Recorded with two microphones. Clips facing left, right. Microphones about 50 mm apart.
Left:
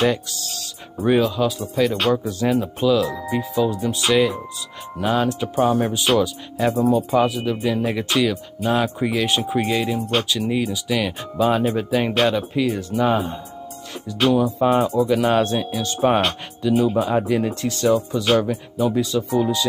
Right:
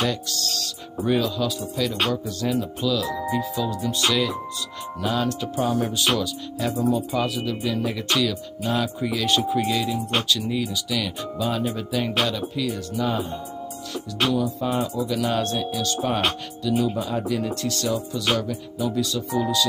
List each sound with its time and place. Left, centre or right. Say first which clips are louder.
0.0 s speech: left 5 dB; centre
6.7 s speech: left 4 dB; centre
7.2 s speech: left 6 dB; left
9.4 s speech: left 1 dB; centre
9.7 s speech: left 3 dB; left
9.9 s speech: left 3 dB; centre
10.2 s speech: left 3 dB; left
14.3 s speech: left 9 dB; left